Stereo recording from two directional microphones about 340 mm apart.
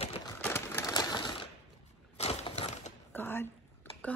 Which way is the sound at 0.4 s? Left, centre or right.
Centre.